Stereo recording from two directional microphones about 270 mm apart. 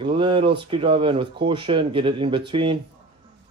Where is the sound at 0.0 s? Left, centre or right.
Centre.